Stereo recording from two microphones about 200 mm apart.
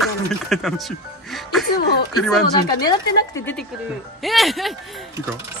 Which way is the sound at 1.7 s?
50° left (ahead or behind).